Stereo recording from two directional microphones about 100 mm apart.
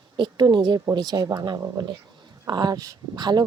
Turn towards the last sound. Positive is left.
turn(degrees=-45)  # may be behind; listen again after turning